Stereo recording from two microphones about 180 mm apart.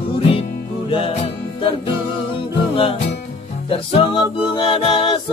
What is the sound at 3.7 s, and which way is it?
Music, 30° left (ahead or behind).